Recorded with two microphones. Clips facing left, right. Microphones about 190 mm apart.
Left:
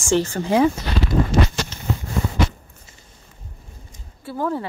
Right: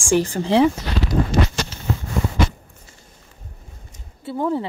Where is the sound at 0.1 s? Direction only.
15° right (ahead or behind).